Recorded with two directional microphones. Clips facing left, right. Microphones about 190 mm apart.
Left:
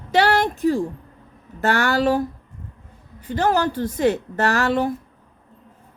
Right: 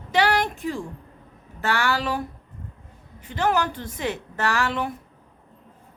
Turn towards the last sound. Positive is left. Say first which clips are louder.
# left 5 dB
turn(degrees=40)  # may be behind; listen again after turning